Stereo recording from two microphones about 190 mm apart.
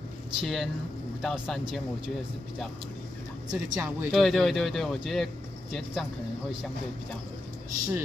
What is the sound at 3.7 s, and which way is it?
Speech, 15° right (ahead or behind).